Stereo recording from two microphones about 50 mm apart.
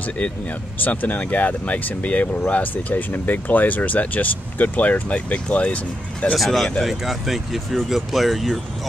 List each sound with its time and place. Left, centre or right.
0.8 s speech: left
6.3 s speech: centre